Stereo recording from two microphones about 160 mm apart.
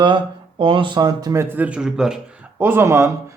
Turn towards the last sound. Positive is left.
turn(degrees=-15)  # may be behind; listen again after turning